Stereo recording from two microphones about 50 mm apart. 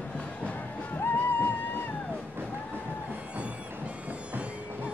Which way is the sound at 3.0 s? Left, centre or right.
Right.